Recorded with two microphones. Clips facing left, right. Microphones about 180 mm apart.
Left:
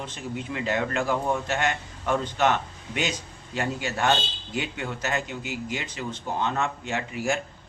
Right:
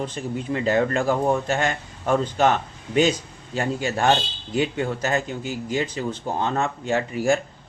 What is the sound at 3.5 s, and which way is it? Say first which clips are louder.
A man's voice: right 4 dB; 30° right (ahead or behind).